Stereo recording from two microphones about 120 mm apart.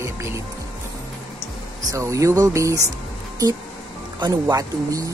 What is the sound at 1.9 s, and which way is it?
Speech, 25° right (ahead or behind).